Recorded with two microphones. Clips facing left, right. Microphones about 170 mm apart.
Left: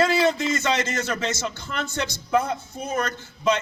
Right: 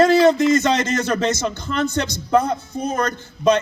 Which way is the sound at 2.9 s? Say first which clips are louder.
Right 4 dB; 40° right (ahead or behind).